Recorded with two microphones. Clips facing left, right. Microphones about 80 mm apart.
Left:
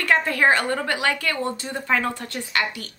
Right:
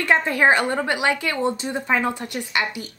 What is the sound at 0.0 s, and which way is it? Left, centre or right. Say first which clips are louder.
A woman's voice: right 1 dB; right.